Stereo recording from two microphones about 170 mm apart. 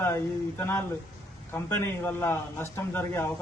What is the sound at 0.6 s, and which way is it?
A man's voice, 15° left (ahead or behind).